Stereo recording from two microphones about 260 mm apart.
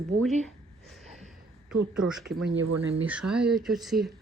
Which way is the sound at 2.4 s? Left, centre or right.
Right.